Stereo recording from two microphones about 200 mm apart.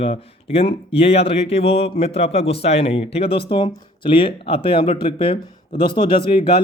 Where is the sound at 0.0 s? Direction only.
30° left (ahead or behind).